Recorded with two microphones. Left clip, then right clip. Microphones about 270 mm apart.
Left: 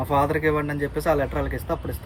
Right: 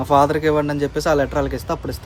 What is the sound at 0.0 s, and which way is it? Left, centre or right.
Speech, right.